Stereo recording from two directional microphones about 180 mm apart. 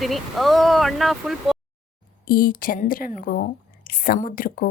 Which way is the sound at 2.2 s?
55° left (ahead or behind).